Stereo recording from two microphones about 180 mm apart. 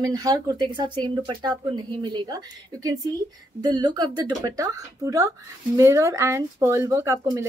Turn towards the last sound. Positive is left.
turn(degrees=-15)  # may be behind; listen again after turning